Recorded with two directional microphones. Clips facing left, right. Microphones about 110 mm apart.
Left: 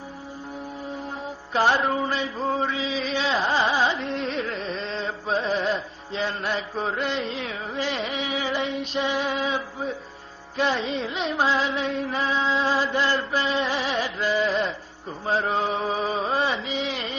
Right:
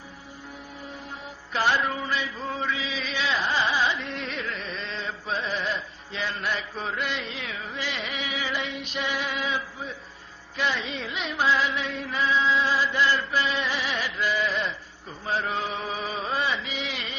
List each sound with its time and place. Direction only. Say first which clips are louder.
1.8 s chant: left 4 dB; 35° left (ahead or behind)
3.4 s carnatic music: left 2 dB; 35° left (ahead or behind)
10.6 s chant: left 5 dB; 30° left (ahead or behind)
13.7 s music: left 4 dB; 35° left (ahead or behind)